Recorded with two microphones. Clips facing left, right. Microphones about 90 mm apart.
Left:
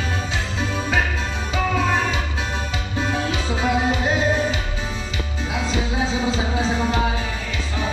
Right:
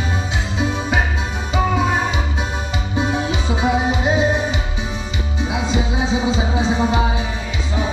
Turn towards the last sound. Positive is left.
turn(degrees=-15)  # may be behind; listen again after turning